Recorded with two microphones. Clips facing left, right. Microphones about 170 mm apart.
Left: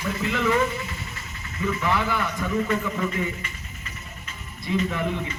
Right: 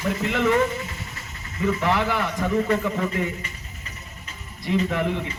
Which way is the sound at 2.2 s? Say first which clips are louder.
Right 3 dB; 30° right (ahead or behind).